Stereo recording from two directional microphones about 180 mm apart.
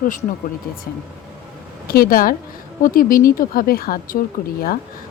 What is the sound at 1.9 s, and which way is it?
Speech, 55° left (ahead or behind).